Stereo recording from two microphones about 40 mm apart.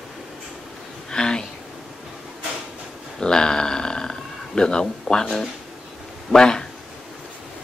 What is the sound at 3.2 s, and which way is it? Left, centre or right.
Speech, centre.